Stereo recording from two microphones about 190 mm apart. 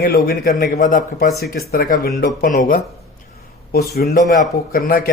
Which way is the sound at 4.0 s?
50° left (ahead or behind).